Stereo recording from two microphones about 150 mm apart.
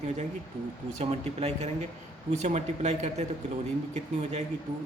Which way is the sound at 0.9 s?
45° right (ahead or behind).